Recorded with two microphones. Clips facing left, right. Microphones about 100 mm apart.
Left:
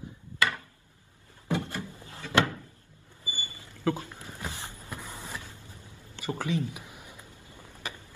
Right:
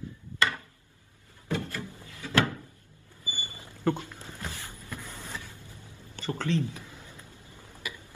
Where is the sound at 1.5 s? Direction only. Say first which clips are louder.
Left 1 dB; 20° left (ahead or behind).